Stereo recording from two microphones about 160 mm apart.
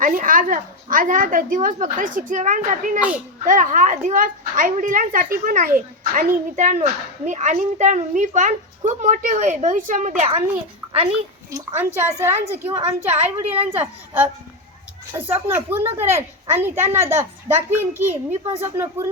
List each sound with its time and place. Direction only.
0.0 s a woman's voice: 55° right (ahead or behind)
11.9 s a child's voice: 15° right (ahead or behind)
13.4 s a woman's voice: 40° right (ahead or behind)
13.7 s a child's voice: 10° right (ahead or behind)
18.3 s a woman's voice: 40° right (ahead or behind)
18.6 s a child's voice: 15° right (ahead or behind)